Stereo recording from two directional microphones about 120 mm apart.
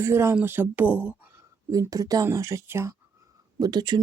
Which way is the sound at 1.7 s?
30° right (ahead or behind).